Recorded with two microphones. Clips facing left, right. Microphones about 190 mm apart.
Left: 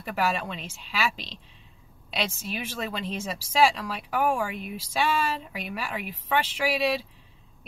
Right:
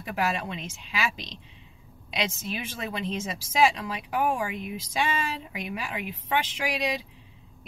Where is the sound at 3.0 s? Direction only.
15° right (ahead or behind).